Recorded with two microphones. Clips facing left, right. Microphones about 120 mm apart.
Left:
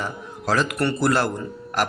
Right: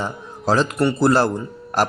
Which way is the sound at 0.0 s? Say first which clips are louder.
Right 4 dB; 30° right (ahead or behind).